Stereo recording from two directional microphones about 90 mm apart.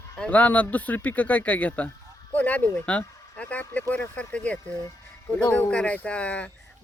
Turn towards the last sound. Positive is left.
turn(degrees=10)  # may be behind; listen again after turning